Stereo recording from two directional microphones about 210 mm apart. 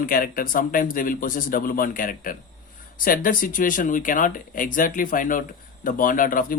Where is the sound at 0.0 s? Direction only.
45° left (ahead or behind).